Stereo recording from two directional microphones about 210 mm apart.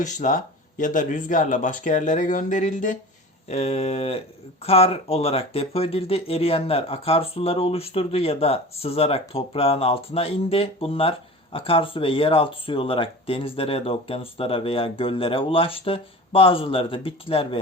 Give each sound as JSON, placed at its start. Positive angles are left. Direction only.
{"t": 0.0, "sound": "speech", "side_deg": 35}